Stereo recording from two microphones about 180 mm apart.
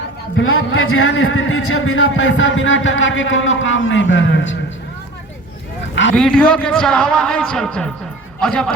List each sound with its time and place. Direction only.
0.3 s a man's voice: 90° left
5.9 s a sound: 90° left
6.1 s a man's voice: 5° left (ahead or behind)